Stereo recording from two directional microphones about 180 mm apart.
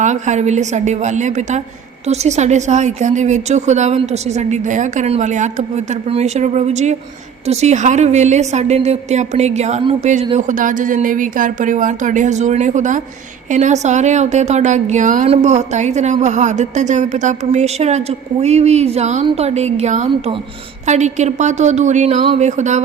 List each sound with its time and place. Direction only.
0.0 s a woman's voice: 40° right (ahead or behind)